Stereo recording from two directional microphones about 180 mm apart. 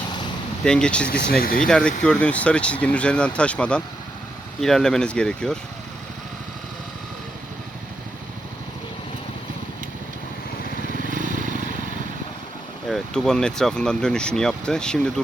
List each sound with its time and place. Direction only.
0.6 s speech: 5° left (ahead or behind)
1.4 s speech: 55° left (ahead or behind)
1.6 s speech: 5° left (ahead or behind)
11.1 s vehicle: 45° right (ahead or behind)
12.9 s speech: 5° left (ahead or behind)